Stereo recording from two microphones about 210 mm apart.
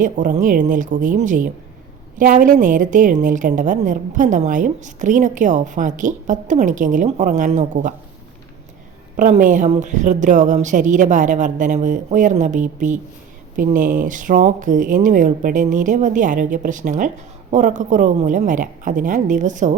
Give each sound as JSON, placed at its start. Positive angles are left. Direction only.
{"t": 0.0, "sound": "a woman's voice", "side_deg": -40}
{"t": 9.1, "sound": "a woman's voice", "side_deg": -40}